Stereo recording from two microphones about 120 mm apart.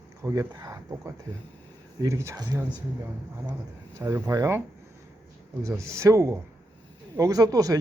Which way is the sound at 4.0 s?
25° right (ahead or behind).